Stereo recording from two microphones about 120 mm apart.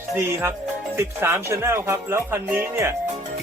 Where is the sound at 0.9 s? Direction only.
20° right (ahead or behind).